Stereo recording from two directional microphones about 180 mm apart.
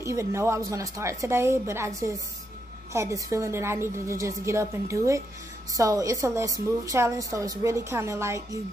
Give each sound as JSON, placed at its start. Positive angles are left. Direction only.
{"t": 0.0, "sound": "a woman's voice", "side_deg": -15}